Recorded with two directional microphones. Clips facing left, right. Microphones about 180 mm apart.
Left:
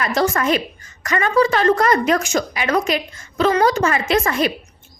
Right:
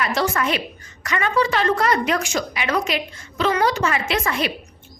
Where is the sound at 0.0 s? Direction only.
40° left (ahead or behind).